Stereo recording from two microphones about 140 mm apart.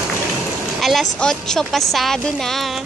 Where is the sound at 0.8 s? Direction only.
Centre (ahead or behind).